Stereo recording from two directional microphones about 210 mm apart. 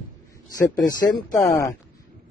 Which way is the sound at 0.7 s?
20° left (ahead or behind).